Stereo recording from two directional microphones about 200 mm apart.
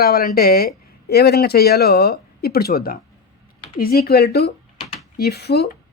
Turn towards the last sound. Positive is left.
turn(degrees=55)  # may be behind; listen again after turning